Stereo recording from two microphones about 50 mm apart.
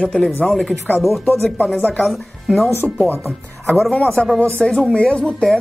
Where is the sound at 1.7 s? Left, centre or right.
Left.